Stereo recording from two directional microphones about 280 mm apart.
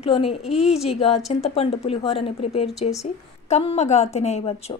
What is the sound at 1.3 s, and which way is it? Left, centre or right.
A woman's voice, left.